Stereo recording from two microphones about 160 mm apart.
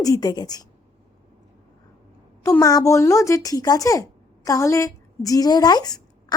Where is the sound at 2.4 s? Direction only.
20° left (ahead or behind).